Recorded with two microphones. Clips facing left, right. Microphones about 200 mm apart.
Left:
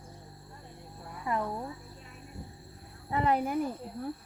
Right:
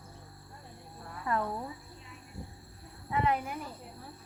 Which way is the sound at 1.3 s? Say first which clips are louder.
Even; 25° left (ahead or behind).